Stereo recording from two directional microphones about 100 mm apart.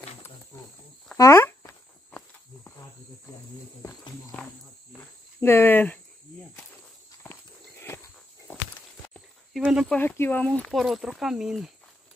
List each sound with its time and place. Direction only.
1.1 s a sound: 30° left (ahead or behind)
2.0 s walk: 15° left (ahead or behind)
5.4 s speech: 20° left (ahead or behind)
7.2 s walk: 20° left (ahead or behind)
9.6 s a sound: 5° right (ahead or behind)
10.0 s speech: 20° left (ahead or behind)
10.7 s speech: centre (ahead or behind)